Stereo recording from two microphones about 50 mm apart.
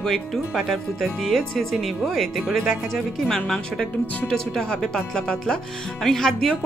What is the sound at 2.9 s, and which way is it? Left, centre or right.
Speech, centre.